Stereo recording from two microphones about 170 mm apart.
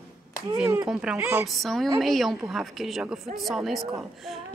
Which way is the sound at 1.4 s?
Centre (ahead or behind).